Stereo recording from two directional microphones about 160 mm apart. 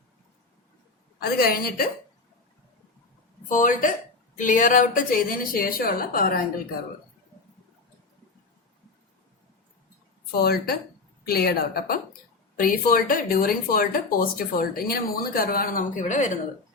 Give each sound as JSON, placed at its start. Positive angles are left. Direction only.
{"t": 1.2, "sound": "a woman's voice", "side_deg": 70}
{"t": 3.5, "sound": "speech", "side_deg": 55}
{"t": 10.3, "sound": "a woman's voice", "side_deg": 75}
{"t": 12.5, "sound": "speech", "side_deg": 60}